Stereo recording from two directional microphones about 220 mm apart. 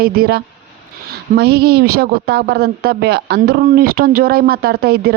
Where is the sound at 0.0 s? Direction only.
45° right (ahead or behind).